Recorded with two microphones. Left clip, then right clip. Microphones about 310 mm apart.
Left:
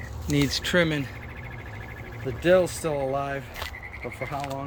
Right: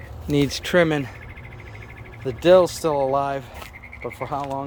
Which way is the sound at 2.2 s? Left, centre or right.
Centre.